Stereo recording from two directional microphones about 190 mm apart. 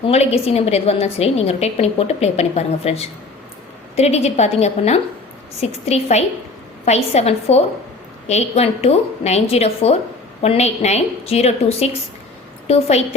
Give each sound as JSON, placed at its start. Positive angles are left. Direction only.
{"t": 0.0, "sound": "a woman's voice", "side_deg": 35}